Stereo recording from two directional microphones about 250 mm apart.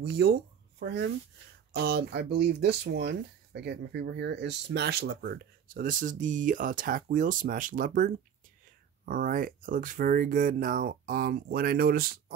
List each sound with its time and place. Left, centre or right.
0.0 s speech: right